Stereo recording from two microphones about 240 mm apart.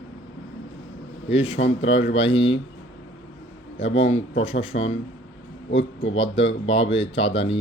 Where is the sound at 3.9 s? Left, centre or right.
Left.